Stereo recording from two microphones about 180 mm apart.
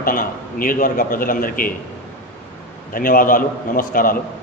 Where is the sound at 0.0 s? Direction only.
50° left (ahead or behind).